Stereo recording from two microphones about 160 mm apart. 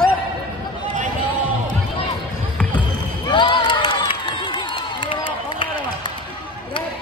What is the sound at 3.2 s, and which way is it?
Crowd, 30° left (ahead or behind).